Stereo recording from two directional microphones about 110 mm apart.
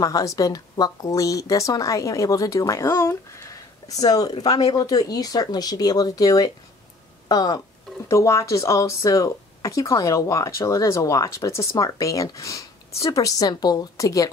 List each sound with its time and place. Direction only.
0.0 s speech: 30° left (ahead or behind)